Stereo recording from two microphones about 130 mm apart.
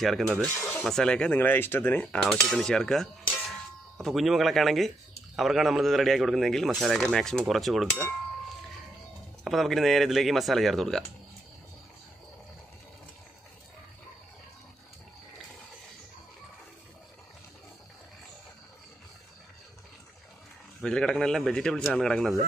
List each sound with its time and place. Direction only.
0.6 s speech: 20° left (ahead or behind)
0.8 s speech: 5° left (ahead or behind)
2.2 s cutlery: 5° left (ahead or behind)
4.0 s speech: centre (ahead or behind)
9.4 s speech: centre (ahead or behind)
20.8 s speech: 5° left (ahead or behind)